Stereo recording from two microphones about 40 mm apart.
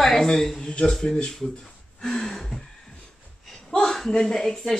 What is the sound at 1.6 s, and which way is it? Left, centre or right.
Gasp, centre.